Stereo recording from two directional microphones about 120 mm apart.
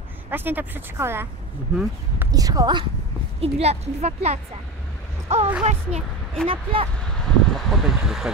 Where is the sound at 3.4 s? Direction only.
60° right (ahead or behind).